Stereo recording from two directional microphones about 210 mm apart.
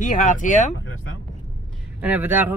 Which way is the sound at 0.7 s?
70° left (ahead or behind).